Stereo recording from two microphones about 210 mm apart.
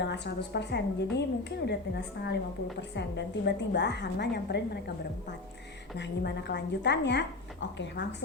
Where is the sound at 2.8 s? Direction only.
55° left (ahead or behind).